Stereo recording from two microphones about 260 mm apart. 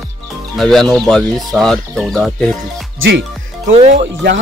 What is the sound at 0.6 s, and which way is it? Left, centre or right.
Speech, centre.